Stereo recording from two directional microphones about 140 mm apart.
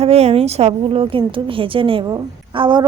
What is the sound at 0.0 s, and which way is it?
A woman's voice, 45° right (ahead or behind).